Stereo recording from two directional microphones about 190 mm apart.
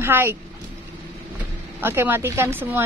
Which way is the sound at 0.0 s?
10° right (ahead or behind).